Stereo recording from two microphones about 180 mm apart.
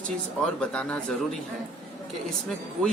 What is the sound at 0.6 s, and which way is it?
Speech, 5° left (ahead or behind).